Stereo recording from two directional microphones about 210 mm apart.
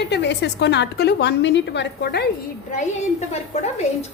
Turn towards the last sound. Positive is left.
turn(degrees=30)  # may be behind; listen again after turning